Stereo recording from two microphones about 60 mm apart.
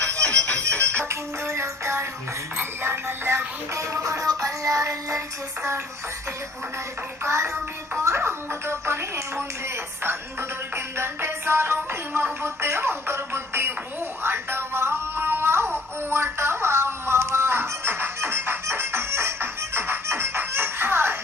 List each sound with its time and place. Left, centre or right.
0.1 s music: centre
1.0 s music: right
2.6 s music: right
7.3 s music: right
8.0 s speech: right
10.8 s music: right